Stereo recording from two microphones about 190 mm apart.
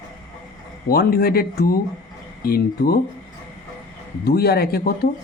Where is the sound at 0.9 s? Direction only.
55° left (ahead or behind).